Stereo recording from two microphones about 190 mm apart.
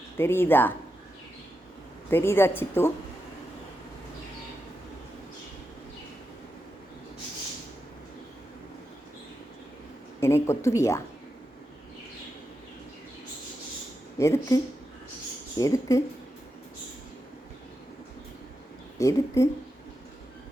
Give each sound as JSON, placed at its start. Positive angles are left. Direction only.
{"t": 0.2, "sound": "speech", "side_deg": 10}
{"t": 2.0, "sound": "speech", "side_deg": 10}
{"t": 10.2, "sound": "speech", "side_deg": 15}
{"t": 14.2, "sound": "speech", "side_deg": 15}
{"t": 18.9, "sound": "speech", "side_deg": 15}